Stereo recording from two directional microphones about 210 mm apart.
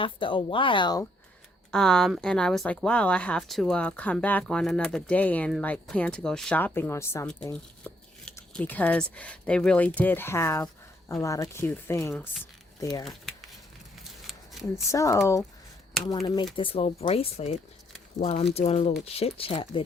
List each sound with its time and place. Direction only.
0.0 s speech: 25° left (ahead or behind)
1.7 s speech: centre (ahead or behind)
14.0 s a sound: centre (ahead or behind)
14.8 s speech: 15° left (ahead or behind)
16.2 s speech: 20° left (ahead or behind)